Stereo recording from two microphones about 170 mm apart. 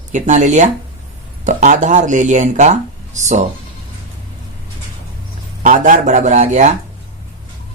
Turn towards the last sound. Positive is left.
turn(degrees=-45)  # may be behind; listen again after turning